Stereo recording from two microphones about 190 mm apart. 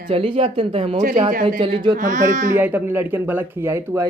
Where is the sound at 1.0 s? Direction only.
40° right (ahead or behind).